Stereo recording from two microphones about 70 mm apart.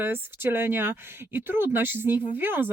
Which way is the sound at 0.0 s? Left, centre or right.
Right.